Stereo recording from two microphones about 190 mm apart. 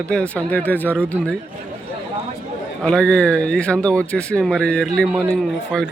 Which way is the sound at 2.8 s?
5° left (ahead or behind).